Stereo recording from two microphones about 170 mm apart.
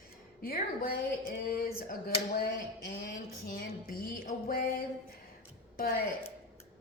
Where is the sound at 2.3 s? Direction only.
65° left (ahead or behind).